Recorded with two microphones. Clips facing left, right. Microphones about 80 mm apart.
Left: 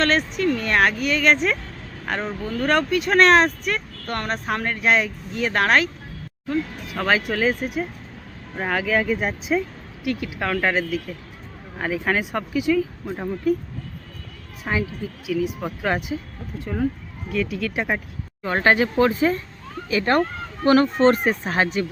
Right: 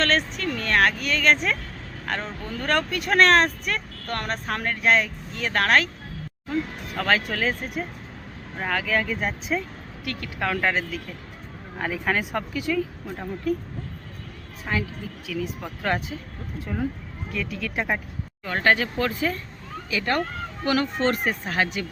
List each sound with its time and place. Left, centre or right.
0.0 s speech: centre
6.9 s speech: centre
14.6 s speech: centre
17.3 s speech: centre
18.4 s speech: left
19.9 s speech: left